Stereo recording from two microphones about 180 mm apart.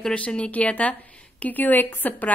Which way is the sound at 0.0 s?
5° left (ahead or behind).